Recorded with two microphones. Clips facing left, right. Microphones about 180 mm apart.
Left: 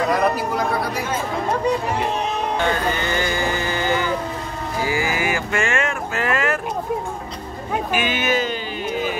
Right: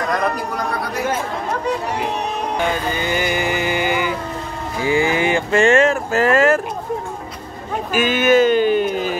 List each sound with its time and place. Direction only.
0.1 s a man's voice: 5° left (ahead or behind)
2.6 s music: 10° right (ahead or behind)
4.8 s speech: 25° right (ahead or behind); by 6.6 s 40° right (ahead or behind)
7.9 s a sound: 45° right (ahead or behind)